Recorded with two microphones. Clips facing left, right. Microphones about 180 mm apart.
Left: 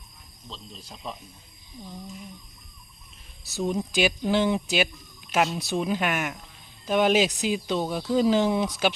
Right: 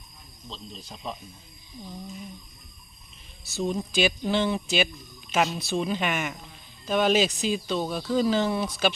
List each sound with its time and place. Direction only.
0.5 s speech: centre (ahead or behind)
3.5 s speech: 15° left (ahead or behind)
5.5 s speech: 15° left (ahead or behind)